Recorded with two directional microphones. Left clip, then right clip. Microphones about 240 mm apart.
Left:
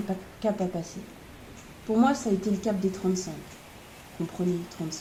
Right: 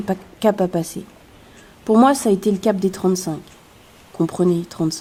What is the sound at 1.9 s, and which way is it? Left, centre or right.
Speech, right.